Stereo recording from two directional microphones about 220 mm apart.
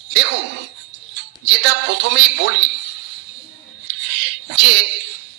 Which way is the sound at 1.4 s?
55° right (ahead or behind).